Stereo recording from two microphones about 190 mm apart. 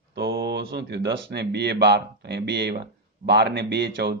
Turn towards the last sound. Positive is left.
turn(degrees=-60)  # may be behind; listen again after turning